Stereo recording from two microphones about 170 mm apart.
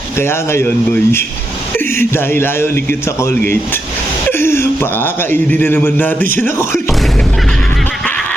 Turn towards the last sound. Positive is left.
turn(degrees=15)  # may be behind; listen again after turning